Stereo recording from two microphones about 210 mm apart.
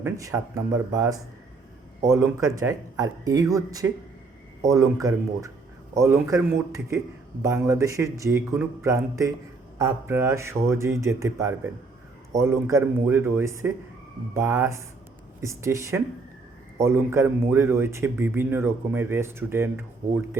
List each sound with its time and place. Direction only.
0.0 s a man's voice: 15° right (ahead or behind)